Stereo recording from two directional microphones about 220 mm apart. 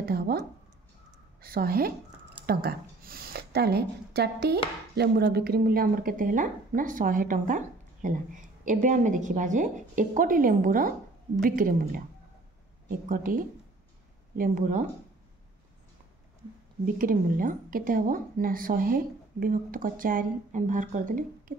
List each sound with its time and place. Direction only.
0.0 s a woman's voice: 45° right (ahead or behind)
16.8 s speech: 40° right (ahead or behind)